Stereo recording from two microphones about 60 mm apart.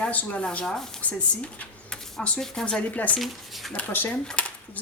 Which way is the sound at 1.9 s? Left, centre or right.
Centre.